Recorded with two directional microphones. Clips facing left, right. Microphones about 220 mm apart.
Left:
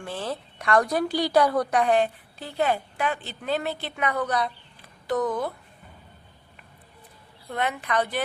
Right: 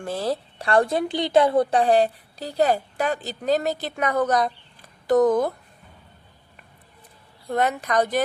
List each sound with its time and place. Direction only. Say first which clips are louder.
0.0 s speech: right 6 dB; 40° right (ahead or behind)
7.5 s speech: right 5 dB; 40° right (ahead or behind)